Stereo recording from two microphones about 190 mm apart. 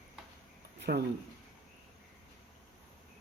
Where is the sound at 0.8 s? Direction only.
55° right (ahead or behind).